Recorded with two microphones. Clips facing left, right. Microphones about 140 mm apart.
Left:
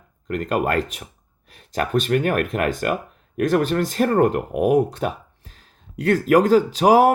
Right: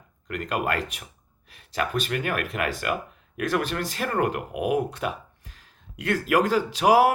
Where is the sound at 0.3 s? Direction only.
40° left (ahead or behind).